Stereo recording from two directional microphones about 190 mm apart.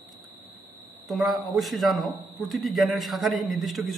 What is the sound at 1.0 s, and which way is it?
A man's voice, centre (ahead or behind).